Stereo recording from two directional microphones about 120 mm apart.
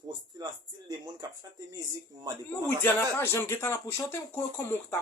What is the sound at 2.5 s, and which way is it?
Speech, 20° left (ahead or behind).